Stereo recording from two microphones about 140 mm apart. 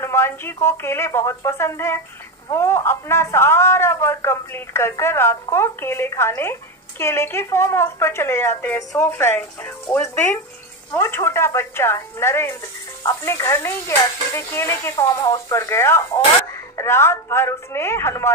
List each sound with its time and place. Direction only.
0.0 s speech: 20° left (ahead or behind)